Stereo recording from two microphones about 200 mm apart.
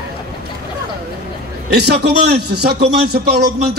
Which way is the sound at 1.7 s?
55° right (ahead or behind).